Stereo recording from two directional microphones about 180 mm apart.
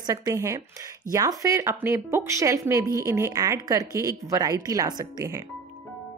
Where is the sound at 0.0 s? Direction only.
20° right (ahead or behind).